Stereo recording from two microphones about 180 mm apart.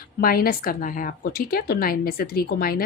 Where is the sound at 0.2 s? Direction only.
55° left (ahead or behind).